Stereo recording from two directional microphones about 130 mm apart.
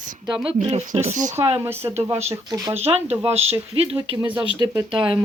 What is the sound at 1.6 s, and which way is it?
Speech, 20° right (ahead or behind).